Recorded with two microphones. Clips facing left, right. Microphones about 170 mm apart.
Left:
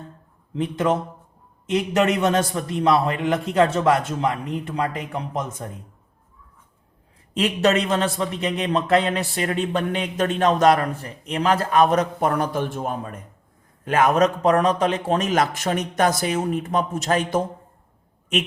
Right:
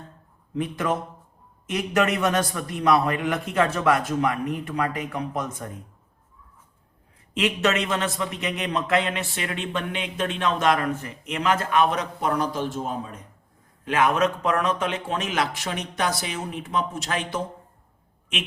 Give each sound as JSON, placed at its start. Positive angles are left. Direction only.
{"t": 0.5, "sound": "a man's voice", "side_deg": 30}
{"t": 7.3, "sound": "a man's voice", "side_deg": 35}
{"t": 13.8, "sound": "speech", "side_deg": 45}